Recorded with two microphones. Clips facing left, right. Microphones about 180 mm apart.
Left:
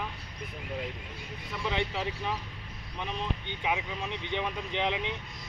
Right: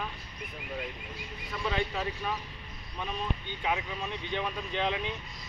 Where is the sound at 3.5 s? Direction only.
10° left (ahead or behind).